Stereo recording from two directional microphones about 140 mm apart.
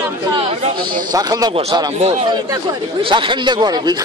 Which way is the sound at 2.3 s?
25° right (ahead or behind).